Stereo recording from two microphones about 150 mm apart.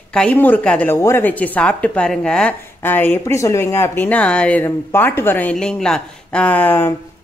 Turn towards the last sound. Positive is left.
turn(degrees=10)  # may be behind; listen again after turning